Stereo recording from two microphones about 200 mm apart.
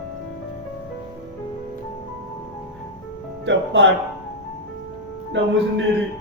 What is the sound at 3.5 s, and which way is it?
Speech, 65° right (ahead or behind).